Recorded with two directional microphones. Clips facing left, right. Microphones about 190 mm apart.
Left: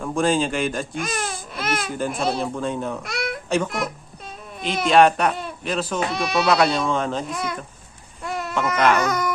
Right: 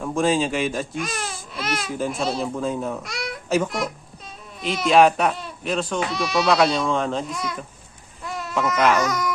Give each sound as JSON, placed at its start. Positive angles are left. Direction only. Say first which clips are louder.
{"t": 0.0, "sound": "speech", "louder": "even", "side_deg": 0}
{"t": 0.9, "sound": "speech", "louder": "left 2 dB", "side_deg": 50}
{"t": 1.9, "sound": "speech", "louder": "right 1 dB", "side_deg": 0}
{"t": 3.0, "sound": "babbling", "louder": "left 3 dB", "side_deg": 60}
{"t": 3.5, "sound": "speech", "louder": "right 1 dB", "side_deg": -5}
{"t": 4.9, "sound": "speech", "louder": "even", "side_deg": 0}
{"t": 6.1, "sound": "speech", "louder": "left 1 dB", "side_deg": 55}
{"t": 6.4, "sound": "speech", "louder": "even", "side_deg": 0}
{"t": 7.3, "sound": "speech", "louder": "left 2 dB", "side_deg": 55}
{"t": 8.2, "sound": "a sound", "louder": "left 3 dB", "side_deg": 60}
{"t": 8.5, "sound": "speech", "louder": "even", "side_deg": 0}
{"t": 9.0, "sound": "speech", "louder": "left 1 dB", "side_deg": 60}